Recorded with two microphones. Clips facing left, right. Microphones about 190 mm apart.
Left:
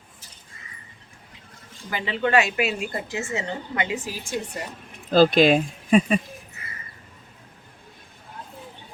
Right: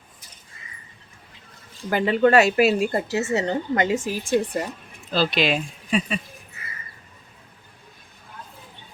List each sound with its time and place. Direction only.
1.9 s speech: 50° right (ahead or behind)
5.1 s speech: 45° left (ahead or behind)